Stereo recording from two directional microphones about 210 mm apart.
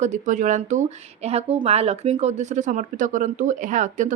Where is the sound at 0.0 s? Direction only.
35° right (ahead or behind).